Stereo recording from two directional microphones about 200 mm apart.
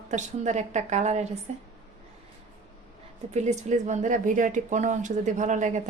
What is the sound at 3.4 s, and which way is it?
A woman's voice, 35° right (ahead or behind).